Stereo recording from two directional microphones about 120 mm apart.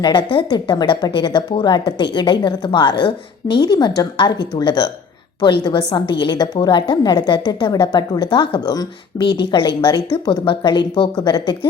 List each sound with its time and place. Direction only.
0.0 s a woman's voice: 40° left (ahead or behind)